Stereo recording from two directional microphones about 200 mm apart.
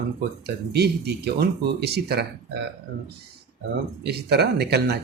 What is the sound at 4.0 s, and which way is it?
Speech, 55° right (ahead or behind).